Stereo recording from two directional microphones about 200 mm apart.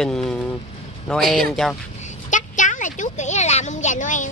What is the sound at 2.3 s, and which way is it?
A woman's voice, 40° left (ahead or behind).